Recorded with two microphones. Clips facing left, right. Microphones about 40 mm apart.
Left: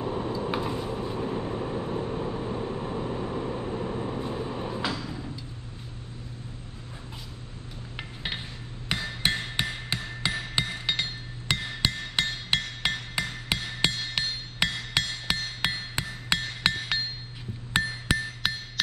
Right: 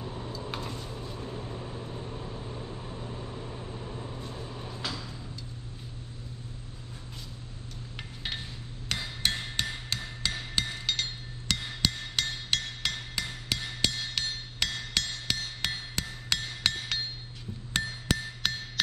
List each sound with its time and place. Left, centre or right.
0.0 s vehicle: left
8.8 s hammer: centre
11.5 s music: left